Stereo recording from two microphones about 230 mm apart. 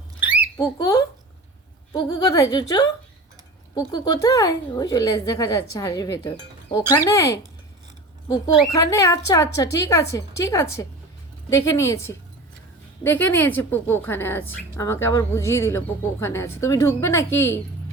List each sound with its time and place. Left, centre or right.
0.5 s a woman's voice: centre
8.6 s a woman's voice: centre
13.0 s a woman's voice: centre